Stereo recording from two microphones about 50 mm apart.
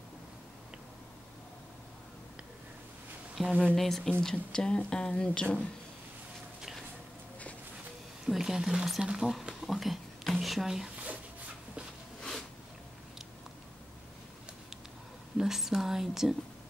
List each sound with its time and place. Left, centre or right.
3.4 s speech: centre
8.4 s speech: centre
9.0 s speech: centre
9.3 s a sound: centre
12.2 s a sound: centre
15.3 s speech: centre